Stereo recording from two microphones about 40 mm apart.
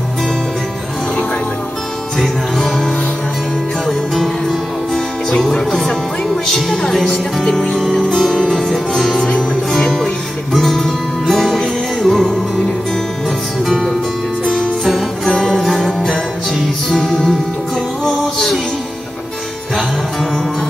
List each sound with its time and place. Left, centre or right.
2.1 s music: centre
5.4 s music: centre
13.7 s music: centre
14.4 s music: centre
14.9 s music: centre